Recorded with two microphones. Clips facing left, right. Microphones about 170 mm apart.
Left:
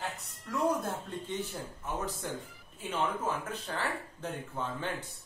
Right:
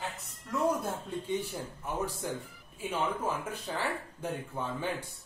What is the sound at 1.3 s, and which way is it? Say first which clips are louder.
Speech: right 4 dB; 10° right (ahead or behind).